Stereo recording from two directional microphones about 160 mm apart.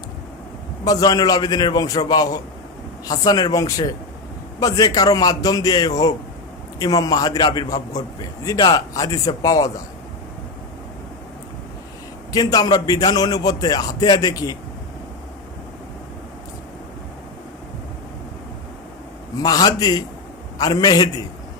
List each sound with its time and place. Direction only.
0.9 s a man's voice: 20° left (ahead or behind)
12.3 s a man's voice: 25° left (ahead or behind)
19.4 s a man's voice: 25° left (ahead or behind)